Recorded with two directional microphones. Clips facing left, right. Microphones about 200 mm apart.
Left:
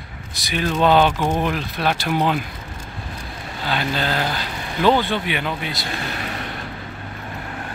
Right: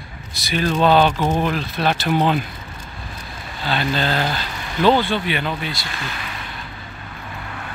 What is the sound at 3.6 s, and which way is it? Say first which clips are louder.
Speech: right 2 dB; 10° left (ahead or behind).